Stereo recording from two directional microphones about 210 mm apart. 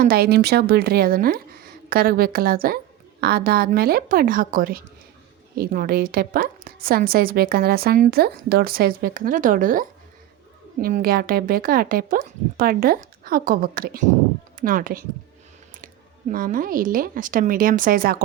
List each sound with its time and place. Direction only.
0.0 s a woman's voice: 45° right (ahead or behind)
16.3 s a woman's voice: 40° right (ahead or behind)